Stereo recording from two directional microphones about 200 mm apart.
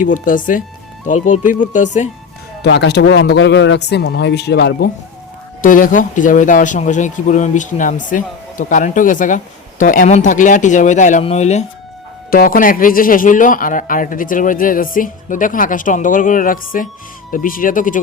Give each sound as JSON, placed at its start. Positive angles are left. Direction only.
{"t": 0.0, "sound": "speech", "side_deg": 40}
{"t": 2.6, "sound": "speech", "side_deg": 55}
{"t": 5.6, "sound": "speech", "side_deg": 40}
{"t": 12.3, "sound": "a man's voice", "side_deg": 45}